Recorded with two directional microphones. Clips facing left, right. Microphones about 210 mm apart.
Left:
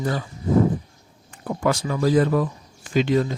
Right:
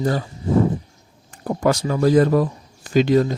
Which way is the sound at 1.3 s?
40° right (ahead or behind).